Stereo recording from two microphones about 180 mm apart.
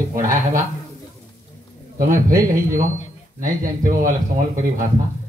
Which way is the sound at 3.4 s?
50° right (ahead or behind).